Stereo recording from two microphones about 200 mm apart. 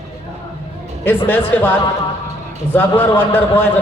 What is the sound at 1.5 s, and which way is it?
Speech, 10° left (ahead or behind).